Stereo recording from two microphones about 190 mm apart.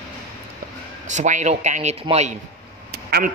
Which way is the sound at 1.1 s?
40° right (ahead or behind).